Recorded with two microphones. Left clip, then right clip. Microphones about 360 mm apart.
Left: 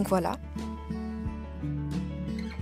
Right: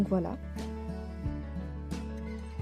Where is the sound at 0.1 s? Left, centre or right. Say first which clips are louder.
Left 5 dB; left.